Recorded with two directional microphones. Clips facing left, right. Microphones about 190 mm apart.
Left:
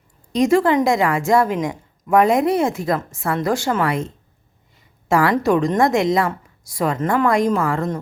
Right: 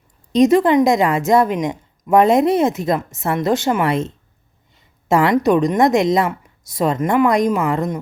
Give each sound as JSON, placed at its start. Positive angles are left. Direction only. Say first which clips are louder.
{"t": 0.3, "sound": "a woman's voice", "louder": "right 3 dB", "side_deg": -20}